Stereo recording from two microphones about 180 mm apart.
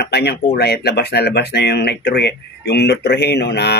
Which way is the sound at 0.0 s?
65° left (ahead or behind).